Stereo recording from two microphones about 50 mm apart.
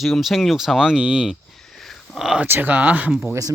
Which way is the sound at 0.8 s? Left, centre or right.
Centre.